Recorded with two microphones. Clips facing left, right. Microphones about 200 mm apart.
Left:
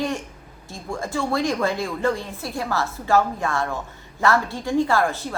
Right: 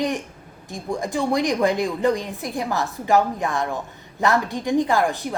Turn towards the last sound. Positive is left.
turn(degrees=-15)  # may be behind; listen again after turning